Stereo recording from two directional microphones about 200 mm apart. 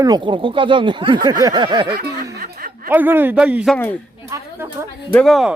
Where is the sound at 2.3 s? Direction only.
45° right (ahead or behind).